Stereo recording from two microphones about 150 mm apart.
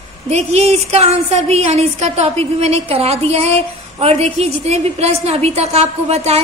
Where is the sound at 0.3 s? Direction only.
45° right (ahead or behind).